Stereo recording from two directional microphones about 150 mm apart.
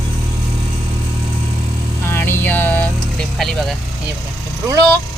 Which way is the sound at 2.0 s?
15° left (ahead or behind).